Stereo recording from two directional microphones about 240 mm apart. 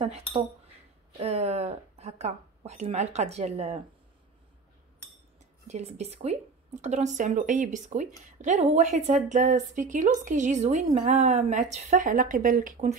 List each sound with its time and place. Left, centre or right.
1.2 s speech: right
5.7 s a woman's voice: right